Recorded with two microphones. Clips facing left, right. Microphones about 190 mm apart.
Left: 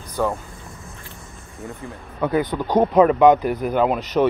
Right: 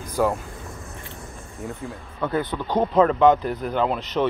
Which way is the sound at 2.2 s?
15° left (ahead or behind).